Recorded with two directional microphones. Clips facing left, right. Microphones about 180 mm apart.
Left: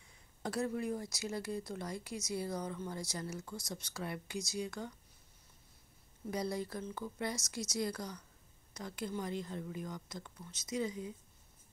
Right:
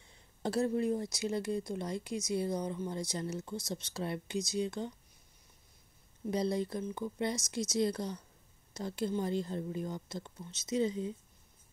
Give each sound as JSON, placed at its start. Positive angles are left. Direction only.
{"t": 0.0, "sound": "speech", "side_deg": -30}
{"t": 6.3, "sound": "speech", "side_deg": -25}